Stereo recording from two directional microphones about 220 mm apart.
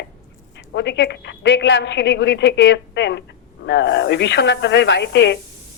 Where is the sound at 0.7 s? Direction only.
50° left (ahead or behind).